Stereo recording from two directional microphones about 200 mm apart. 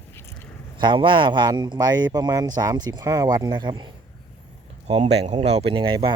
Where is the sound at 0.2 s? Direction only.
15° left (ahead or behind).